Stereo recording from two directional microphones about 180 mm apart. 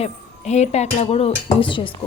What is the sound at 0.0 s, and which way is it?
A woman's voice, 40° left (ahead or behind).